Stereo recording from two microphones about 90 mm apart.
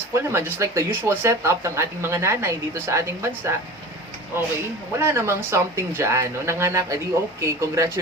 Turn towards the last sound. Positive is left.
turn(degrees=-30)  # may be behind; listen again after turning